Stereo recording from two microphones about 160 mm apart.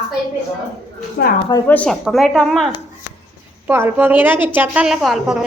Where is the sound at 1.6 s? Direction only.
10° left (ahead or behind).